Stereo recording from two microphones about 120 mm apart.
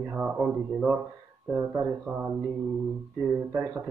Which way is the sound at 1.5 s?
20° right (ahead or behind).